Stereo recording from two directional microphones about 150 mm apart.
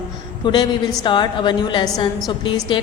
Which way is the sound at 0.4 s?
25° left (ahead or behind).